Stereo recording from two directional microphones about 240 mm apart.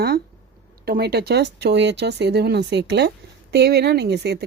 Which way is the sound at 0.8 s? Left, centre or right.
Right.